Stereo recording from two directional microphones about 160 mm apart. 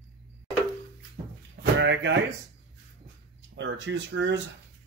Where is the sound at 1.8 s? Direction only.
90° right.